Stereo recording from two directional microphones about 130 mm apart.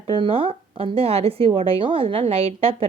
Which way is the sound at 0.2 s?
45° right (ahead or behind).